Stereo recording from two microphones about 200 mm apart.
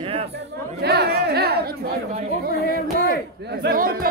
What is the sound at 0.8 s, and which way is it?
Speech, 55° right (ahead or behind).